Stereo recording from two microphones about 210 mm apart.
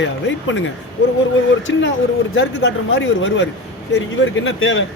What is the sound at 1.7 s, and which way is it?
A man's voice, 60° left (ahead or behind).